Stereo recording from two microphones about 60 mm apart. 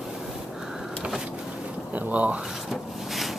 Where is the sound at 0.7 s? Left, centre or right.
Centre.